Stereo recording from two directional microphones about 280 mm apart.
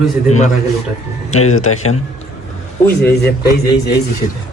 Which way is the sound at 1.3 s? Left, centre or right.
Left.